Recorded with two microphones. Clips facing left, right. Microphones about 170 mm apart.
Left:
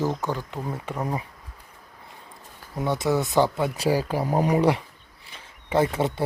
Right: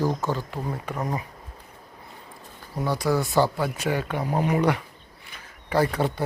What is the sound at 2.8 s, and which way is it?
Speech, 20° left (ahead or behind).